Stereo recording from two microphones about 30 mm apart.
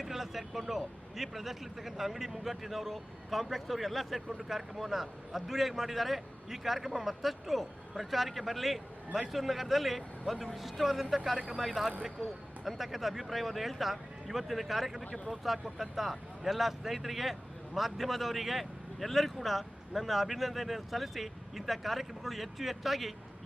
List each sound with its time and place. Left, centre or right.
0.0 s speech: centre
4.4 s speech: centre